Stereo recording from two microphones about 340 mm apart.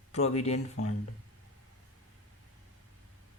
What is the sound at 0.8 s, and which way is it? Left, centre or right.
Speech, left.